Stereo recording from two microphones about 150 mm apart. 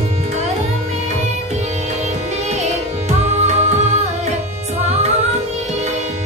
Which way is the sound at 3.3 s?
50° right (ahead or behind).